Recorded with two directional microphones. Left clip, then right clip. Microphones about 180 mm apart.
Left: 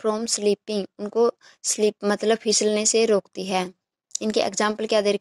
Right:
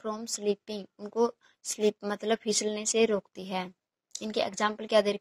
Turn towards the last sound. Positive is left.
turn(degrees=30)  # may be behind; listen again after turning